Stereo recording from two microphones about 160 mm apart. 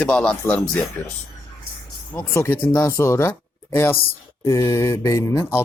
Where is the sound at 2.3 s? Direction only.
15° left (ahead or behind).